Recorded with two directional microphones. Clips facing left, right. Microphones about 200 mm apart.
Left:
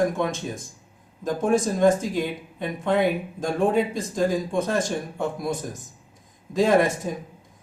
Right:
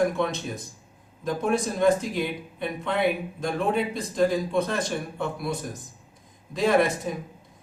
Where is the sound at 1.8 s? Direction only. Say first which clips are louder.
Left 2 dB; 45° left (ahead or behind).